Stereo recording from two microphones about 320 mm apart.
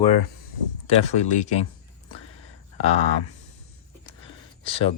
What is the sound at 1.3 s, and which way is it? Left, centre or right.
Speech, left.